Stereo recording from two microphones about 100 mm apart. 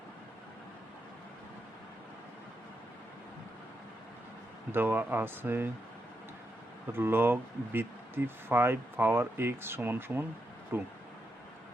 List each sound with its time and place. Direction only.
4.7 s speech: 20° right (ahead or behind)
6.9 s speech: 25° right (ahead or behind)